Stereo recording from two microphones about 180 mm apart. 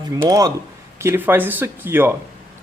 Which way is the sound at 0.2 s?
20° right (ahead or behind).